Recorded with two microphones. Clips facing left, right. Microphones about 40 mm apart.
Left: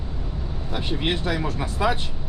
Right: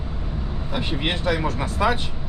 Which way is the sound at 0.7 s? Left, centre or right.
Centre.